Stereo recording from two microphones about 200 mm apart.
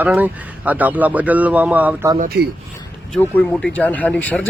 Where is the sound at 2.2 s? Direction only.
50° right (ahead or behind).